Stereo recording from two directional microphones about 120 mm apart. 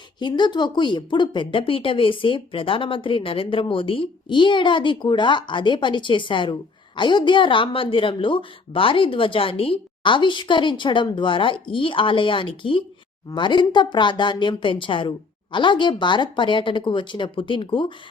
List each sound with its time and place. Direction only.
0.2 s speech: 40° left (ahead or behind)